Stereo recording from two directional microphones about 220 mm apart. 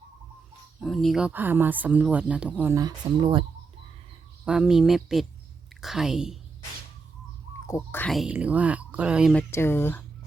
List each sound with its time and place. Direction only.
0.8 s speech: centre (ahead or behind); by 3.4 s 20° right (ahead or behind)
4.4 s speech: 5° right (ahead or behind)
7.7 s speech: 10° left (ahead or behind)
9.5 s speech: 10° left (ahead or behind)